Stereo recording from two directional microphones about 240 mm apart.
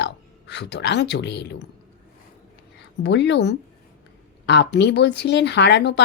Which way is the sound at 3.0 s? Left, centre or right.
Left.